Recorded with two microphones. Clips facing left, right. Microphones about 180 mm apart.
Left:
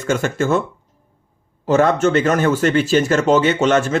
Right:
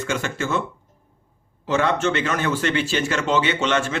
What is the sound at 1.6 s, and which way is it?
Speech, 45° left (ahead or behind).